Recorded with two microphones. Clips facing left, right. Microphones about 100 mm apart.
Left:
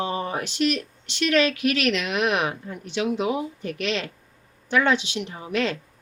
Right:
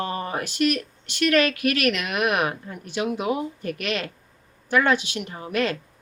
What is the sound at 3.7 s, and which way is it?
Speech, 50° right (ahead or behind).